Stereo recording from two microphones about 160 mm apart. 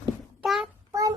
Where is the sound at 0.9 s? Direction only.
20° right (ahead or behind).